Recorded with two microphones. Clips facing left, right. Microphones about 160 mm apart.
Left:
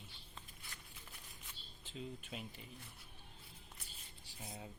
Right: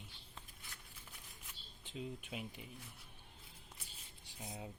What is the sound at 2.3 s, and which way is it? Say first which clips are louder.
Rub: right 2 dB; 10° right (ahead or behind).